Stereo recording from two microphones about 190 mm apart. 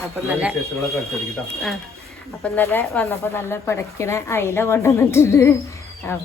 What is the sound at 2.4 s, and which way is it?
Speech, 10° left (ahead or behind).